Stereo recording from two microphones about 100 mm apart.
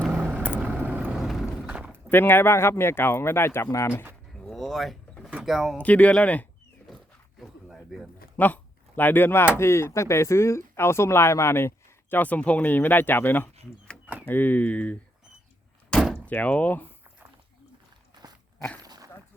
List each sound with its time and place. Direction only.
0.2 s vehicle: 20° right (ahead or behind)
0.9 s horse: 10° right (ahead or behind)
1.9 s speech: 20° left (ahead or behind)
4.4 s vehicle: 5° left (ahead or behind)
5.3 s speech: 5° right (ahead or behind)
5.7 s speech: 15° left (ahead or behind)
6.8 s a sound: centre (ahead or behind)
8.4 s speech: 15° left (ahead or behind)
12.1 s speech: 15° left (ahead or behind)
15.9 s door: centre (ahead or behind)
16.2 s speech: 15° left (ahead or behind)
18.2 s biting: 40° right (ahead or behind)
18.8 s dog: 40° right (ahead or behind)